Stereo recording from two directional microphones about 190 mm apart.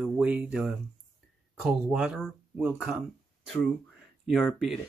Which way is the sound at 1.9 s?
5° right (ahead or behind).